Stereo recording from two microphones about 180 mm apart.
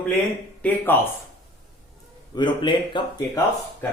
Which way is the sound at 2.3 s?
25° left (ahead or behind).